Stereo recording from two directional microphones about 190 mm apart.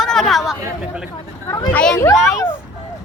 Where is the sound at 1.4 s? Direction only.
15° left (ahead or behind).